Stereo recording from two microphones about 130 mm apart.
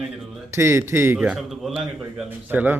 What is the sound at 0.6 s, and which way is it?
Speech, 20° right (ahead or behind).